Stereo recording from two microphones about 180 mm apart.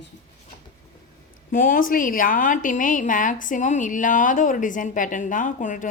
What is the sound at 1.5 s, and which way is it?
A woman's voice, 50° left (ahead or behind).